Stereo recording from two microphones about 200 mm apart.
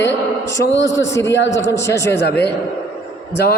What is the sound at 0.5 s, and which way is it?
A man's voice, 65° left (ahead or behind).